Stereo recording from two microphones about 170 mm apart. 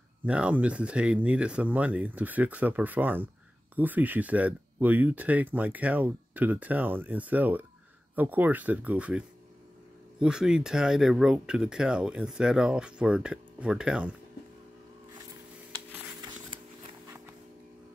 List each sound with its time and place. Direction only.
0.3 s speech: 5° right (ahead or behind)
10.2 s speech: 5° right (ahead or behind)
16.4 s a sound: 25° right (ahead or behind)